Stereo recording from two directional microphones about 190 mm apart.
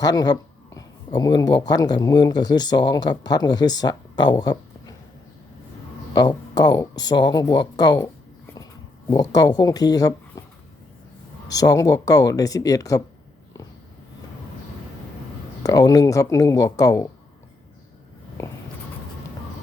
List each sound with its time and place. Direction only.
0.0 s a man's voice: 20° left (ahead or behind)
6.1 s speech: 20° left (ahead or behind)
9.3 s speech: 20° left (ahead or behind)
11.5 s speech: 20° left (ahead or behind)
15.6 s speech: 20° left (ahead or behind)